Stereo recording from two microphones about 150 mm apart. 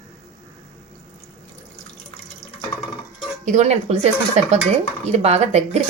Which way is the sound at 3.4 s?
50° right (ahead or behind).